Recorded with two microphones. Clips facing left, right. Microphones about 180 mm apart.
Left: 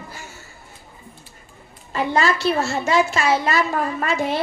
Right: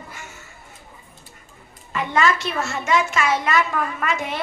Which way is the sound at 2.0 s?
35° left (ahead or behind).